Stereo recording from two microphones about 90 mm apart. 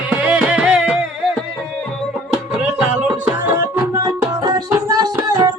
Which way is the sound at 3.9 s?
35° right (ahead or behind).